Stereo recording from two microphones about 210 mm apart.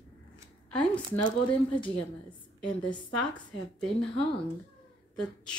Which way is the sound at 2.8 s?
20° left (ahead or behind).